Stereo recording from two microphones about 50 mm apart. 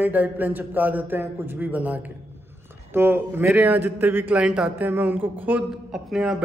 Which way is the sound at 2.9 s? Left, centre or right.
Right.